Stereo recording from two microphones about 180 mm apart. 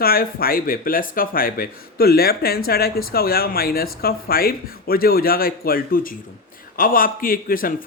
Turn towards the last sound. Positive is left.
turn(degrees=50)  # may be behind; listen again after turning